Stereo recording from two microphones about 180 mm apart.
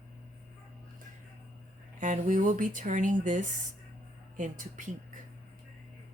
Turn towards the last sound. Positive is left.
turn(degrees=-45)  # may be behind; listen again after turning